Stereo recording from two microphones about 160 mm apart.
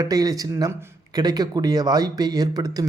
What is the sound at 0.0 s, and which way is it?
Speech, 25° right (ahead or behind).